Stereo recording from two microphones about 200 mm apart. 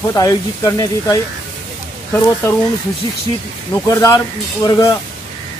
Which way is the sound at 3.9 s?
15° left (ahead or behind).